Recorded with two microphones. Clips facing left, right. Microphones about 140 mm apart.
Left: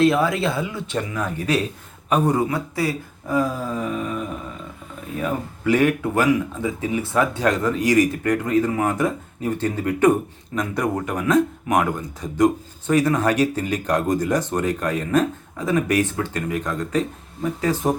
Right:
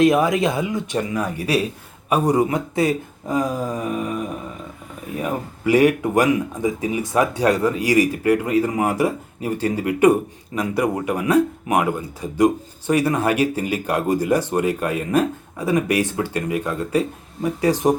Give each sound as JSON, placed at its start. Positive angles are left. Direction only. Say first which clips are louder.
{"t": 0.0, "sound": "speech", "louder": "right 2 dB", "side_deg": -15}
{"t": 5.2, "sound": "speech", "louder": "right 1 dB", "side_deg": -10}